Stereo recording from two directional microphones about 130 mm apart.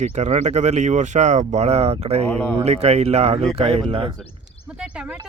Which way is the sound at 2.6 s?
55° right (ahead or behind).